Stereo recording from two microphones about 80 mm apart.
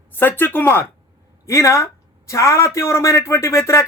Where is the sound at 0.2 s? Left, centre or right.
Left.